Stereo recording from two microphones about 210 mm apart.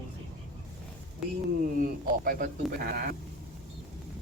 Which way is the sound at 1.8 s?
45° right (ahead or behind).